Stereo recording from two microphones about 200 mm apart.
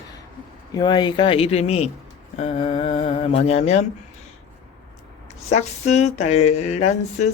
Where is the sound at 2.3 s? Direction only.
30° left (ahead or behind).